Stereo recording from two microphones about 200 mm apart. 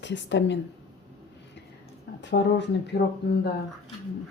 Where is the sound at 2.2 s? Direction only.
60° left (ahead or behind).